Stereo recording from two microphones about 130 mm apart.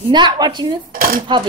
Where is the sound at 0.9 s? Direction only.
90° right.